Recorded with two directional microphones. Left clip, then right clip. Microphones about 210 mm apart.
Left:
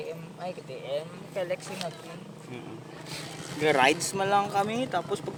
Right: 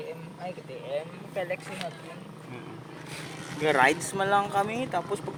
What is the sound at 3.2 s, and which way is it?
Vehicle, 55° left (ahead or behind).